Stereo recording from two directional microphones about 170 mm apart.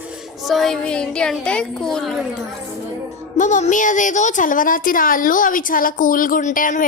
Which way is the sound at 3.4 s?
45° left (ahead or behind).